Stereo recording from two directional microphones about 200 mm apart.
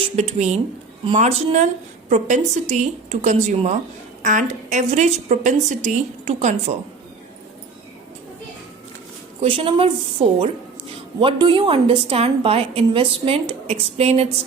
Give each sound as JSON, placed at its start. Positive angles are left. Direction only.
{"t": 0.0, "sound": "a woman's voice", "side_deg": -35}
{"t": 9.4, "sound": "a woman's voice", "side_deg": -25}
{"t": 11.2, "sound": "a woman's voice", "side_deg": -25}